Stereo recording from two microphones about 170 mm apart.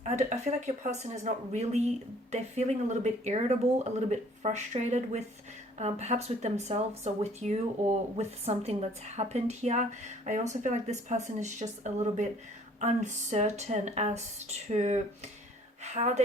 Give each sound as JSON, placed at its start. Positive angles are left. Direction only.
{"t": 0.0, "sound": "speech", "side_deg": -40}